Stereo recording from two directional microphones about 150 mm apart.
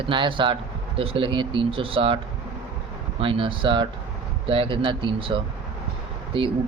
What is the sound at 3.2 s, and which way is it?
Speech, 35° right (ahead or behind).